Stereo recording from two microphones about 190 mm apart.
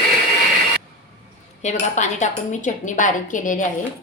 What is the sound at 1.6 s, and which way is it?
Speech, 40° left (ahead or behind).